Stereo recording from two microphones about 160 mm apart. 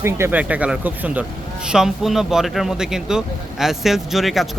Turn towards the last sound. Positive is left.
turn(degrees=0)  # may be behind; listen again after turning